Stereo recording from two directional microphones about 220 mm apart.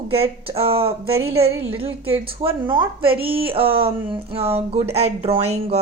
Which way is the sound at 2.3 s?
25° right (ahead or behind).